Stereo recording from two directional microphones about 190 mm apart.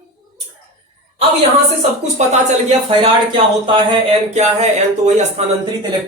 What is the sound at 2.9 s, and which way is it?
Speech, 25° right (ahead or behind).